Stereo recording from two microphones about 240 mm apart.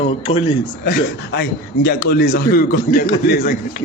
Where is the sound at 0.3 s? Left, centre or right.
Centre.